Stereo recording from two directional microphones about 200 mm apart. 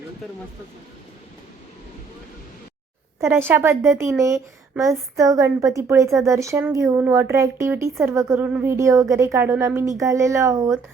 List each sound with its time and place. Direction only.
3.2 s speech: 10° right (ahead or behind)